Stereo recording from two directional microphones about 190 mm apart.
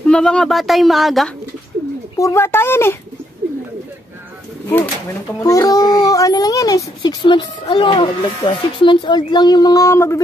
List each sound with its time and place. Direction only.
0.0 s speech: 5° left (ahead or behind)
2.1 s speech: 15° left (ahead or behind)
5.4 s a child's voice: 20° left (ahead or behind)